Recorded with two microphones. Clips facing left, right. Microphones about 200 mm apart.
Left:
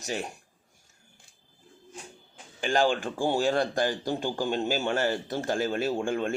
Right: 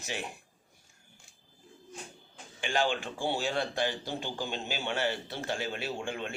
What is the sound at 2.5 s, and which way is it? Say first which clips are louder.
Speech: left 5 dB; 45° left (ahead or behind).